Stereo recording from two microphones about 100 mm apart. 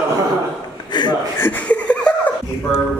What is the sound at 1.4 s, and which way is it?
Laughter, 20° left (ahead or behind).